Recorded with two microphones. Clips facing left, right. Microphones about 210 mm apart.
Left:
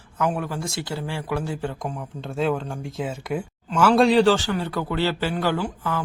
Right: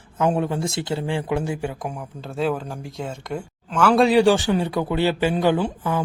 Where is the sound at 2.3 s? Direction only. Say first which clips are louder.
Even; centre (ahead or behind).